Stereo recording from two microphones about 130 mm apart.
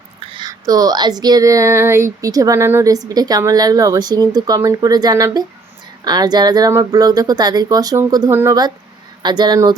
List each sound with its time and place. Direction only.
0.2 s speech: 35° right (ahead or behind)
9.2 s speech: 35° right (ahead or behind)